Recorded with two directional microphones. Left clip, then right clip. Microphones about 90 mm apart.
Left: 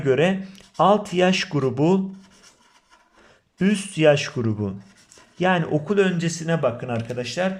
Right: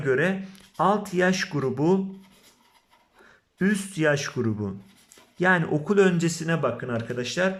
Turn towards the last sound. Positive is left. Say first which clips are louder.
# left 1 dB
turn(degrees=5)  # may be behind; listen again after turning